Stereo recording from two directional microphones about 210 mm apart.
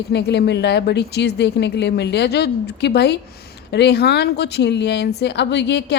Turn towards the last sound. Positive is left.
turn(degrees=55)  # may be behind; listen again after turning